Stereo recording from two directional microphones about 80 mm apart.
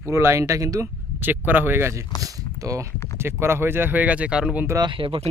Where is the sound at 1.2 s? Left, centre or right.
Right.